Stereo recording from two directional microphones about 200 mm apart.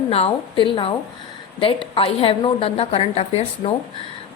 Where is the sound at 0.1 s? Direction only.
25° left (ahead or behind).